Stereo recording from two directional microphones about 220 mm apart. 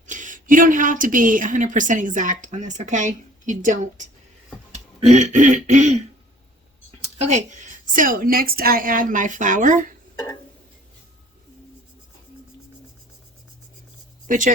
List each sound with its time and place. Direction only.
0.1 s a woman's voice: 35° right (ahead or behind)
7.2 s a woman's voice: 35° right (ahead or behind)
14.3 s speech: 35° right (ahead or behind)